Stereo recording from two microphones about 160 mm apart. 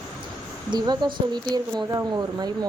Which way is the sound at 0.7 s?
25° right (ahead or behind).